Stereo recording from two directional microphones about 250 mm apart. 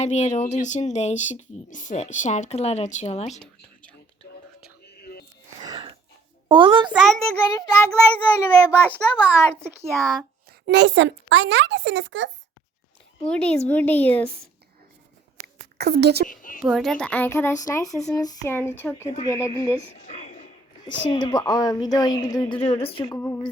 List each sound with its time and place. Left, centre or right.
0.0 s speech: left
4.9 s a sound: left
5.5 s wheeze: centre
6.5 s a child's voice: centre
6.9 s a woman's voice: centre
10.0 s speech: centre
10.7 s a child's voice: right
13.2 s a woman's voice: centre
15.4 s a sound: right
16.3 s a woman's voice: left
16.6 s a woman's voice: centre